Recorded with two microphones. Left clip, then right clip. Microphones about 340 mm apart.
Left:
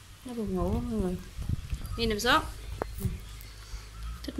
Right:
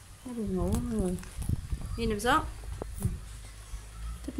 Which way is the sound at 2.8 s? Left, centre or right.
Left.